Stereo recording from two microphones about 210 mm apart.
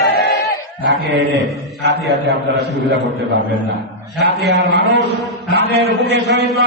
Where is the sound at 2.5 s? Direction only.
55° right (ahead or behind).